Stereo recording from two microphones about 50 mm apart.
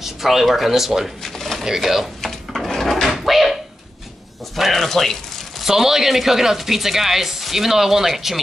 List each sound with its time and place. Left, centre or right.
0.0 s speech: centre
1.2 s pigeon: centre
1.6 s speech: centre
2.2 s drawer open or close: centre
3.1 s a sound: centre
4.6 s speech: centre
5.6 s speech: centre